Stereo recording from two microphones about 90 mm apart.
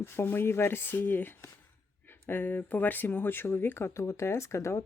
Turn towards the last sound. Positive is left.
turn(degrees=30)  # may be behind; listen again after turning